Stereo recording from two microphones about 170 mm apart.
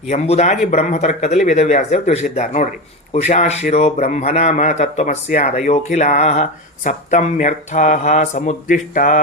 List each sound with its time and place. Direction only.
0.1 s a man's voice: 45° left (ahead or behind)